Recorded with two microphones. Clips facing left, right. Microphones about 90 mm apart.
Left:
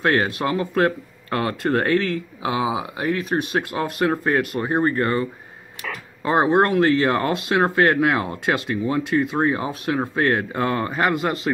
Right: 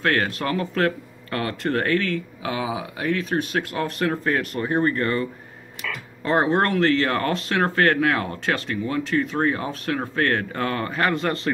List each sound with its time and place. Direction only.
0.0 s speech: 15° left (ahead or behind)
6.2 s speech: 15° left (ahead or behind)